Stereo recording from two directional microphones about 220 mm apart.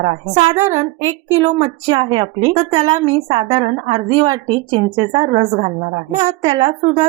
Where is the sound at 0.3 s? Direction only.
30° right (ahead or behind).